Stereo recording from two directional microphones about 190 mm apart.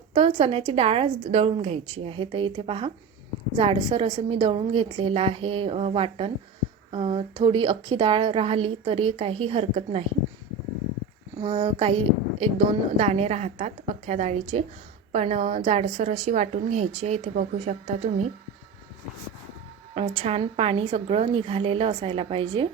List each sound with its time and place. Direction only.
0.1 s a woman's voice: 30° right (ahead or behind)
11.3 s a woman's voice: 30° right (ahead or behind)
19.9 s a woman's voice: 30° right (ahead or behind)